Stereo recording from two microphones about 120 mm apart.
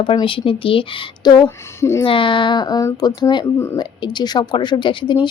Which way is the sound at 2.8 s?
25° left (ahead or behind).